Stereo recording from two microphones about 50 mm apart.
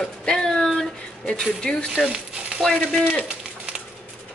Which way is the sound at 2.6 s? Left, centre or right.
Centre.